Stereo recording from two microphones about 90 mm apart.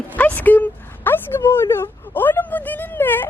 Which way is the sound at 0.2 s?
20° left (ahead or behind).